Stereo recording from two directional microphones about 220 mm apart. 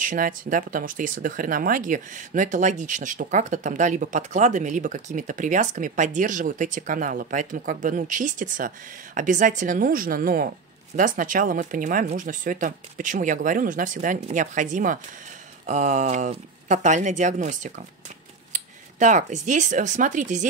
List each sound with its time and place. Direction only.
0.0 s speech: 40° right (ahead or behind)